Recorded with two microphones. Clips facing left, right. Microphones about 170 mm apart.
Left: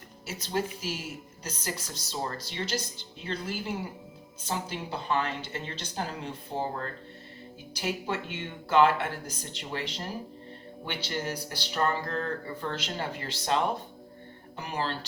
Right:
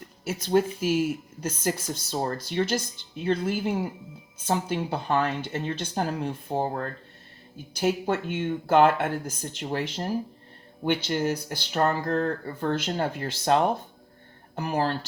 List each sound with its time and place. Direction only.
0.3 s speech: 50° right (ahead or behind)